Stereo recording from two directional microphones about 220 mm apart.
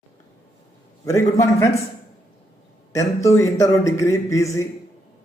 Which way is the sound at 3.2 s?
15° left (ahead or behind).